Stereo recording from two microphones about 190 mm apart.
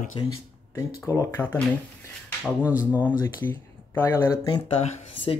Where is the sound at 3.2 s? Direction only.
10° left (ahead or behind).